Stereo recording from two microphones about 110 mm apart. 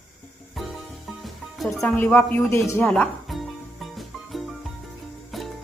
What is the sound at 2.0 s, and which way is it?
Speech, 15° left (ahead or behind).